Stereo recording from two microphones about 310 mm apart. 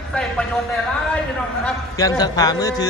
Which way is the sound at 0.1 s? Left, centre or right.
Centre.